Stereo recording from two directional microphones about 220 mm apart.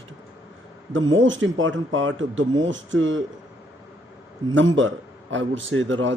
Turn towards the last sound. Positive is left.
turn(degrees=-60)  # may be behind; listen again after turning